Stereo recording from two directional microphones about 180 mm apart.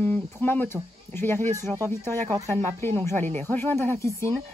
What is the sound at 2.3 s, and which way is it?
Speech, 20° right (ahead or behind).